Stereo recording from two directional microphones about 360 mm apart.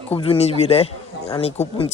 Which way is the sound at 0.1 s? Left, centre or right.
Centre.